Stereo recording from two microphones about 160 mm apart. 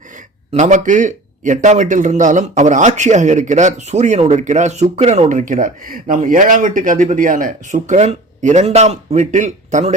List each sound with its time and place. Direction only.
0.5 s a man's voice: 50° right (ahead or behind)